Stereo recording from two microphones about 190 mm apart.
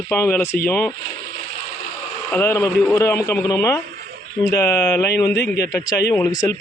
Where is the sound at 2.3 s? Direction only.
10° left (ahead or behind).